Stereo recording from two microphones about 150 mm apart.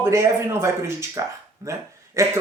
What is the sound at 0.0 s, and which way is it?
Speech, 20° right (ahead or behind).